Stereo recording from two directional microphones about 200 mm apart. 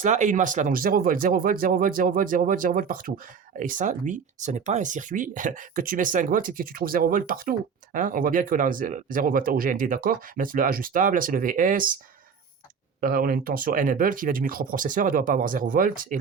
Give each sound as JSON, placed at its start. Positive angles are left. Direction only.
{"t": 0.0, "sound": "speech", "side_deg": -40}
{"t": 13.0, "sound": "speech", "side_deg": -45}